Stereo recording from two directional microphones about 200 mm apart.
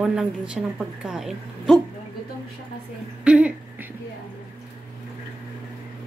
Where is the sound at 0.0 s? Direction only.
5° right (ahead or behind).